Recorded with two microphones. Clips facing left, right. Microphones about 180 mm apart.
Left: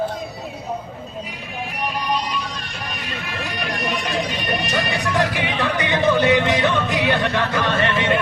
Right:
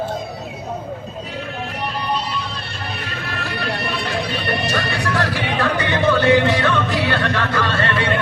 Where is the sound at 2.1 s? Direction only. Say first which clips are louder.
Even; 15° left (ahead or behind).